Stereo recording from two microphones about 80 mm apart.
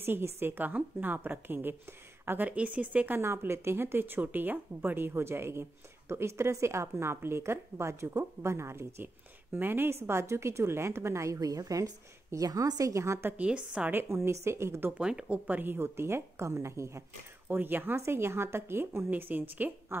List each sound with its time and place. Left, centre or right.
0.0 s a woman's voice: right
3.2 s speech: right
13.4 s a woman's voice: centre
13.9 s speech: right
14.9 s speech: centre; by 17.0 s right
17.5 s a woman's voice: right